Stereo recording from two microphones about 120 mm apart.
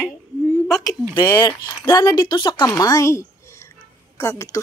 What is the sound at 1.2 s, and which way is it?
A woman's voice, 35° left (ahead or behind).